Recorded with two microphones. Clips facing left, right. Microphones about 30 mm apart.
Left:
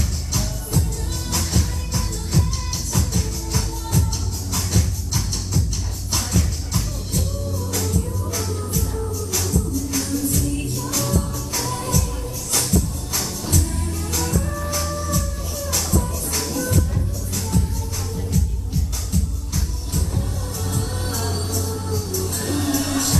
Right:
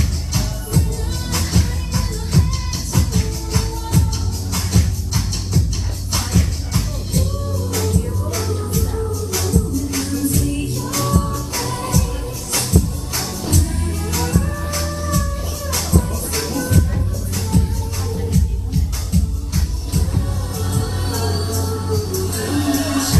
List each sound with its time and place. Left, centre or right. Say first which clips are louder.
0.3 s music: right 2 dB; right
17.5 s music: right 5 dB; right